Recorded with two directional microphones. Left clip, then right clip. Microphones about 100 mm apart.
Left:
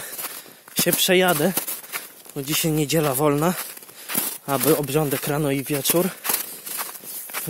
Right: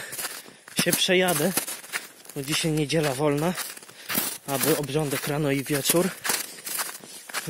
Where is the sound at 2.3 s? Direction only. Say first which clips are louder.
Left 3 dB; 55° left (ahead or behind).